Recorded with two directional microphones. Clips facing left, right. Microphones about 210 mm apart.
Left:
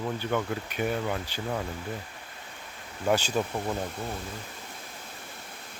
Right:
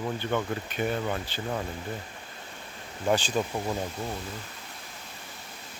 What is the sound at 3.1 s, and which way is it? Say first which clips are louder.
Speech: even; 10° left (ahead or behind).